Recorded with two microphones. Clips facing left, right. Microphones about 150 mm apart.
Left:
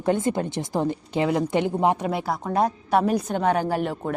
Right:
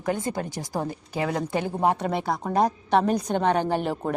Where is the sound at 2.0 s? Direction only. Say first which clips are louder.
Even; 5° left (ahead or behind).